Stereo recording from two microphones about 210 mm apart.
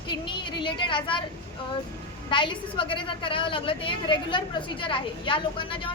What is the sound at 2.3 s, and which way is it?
A woman's voice, 25° left (ahead or behind).